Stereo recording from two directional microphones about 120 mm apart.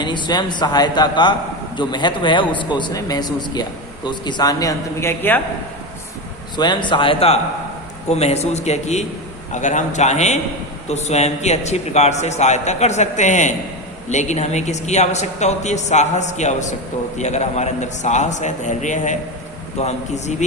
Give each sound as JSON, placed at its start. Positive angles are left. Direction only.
{"t": 0.0, "sound": "a man's voice", "side_deg": 40}
{"t": 6.6, "sound": "speech", "side_deg": 40}
{"t": 8.1, "sound": "speech", "side_deg": 65}
{"t": 9.5, "sound": "a man's voice", "side_deg": 90}
{"t": 14.1, "sound": "a man's voice", "side_deg": 75}
{"t": 17.2, "sound": "a man's voice", "side_deg": 70}
{"t": 19.8, "sound": "a man's voice", "side_deg": 75}